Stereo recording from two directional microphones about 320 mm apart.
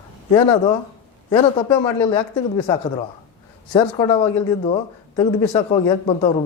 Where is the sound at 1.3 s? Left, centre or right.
Centre.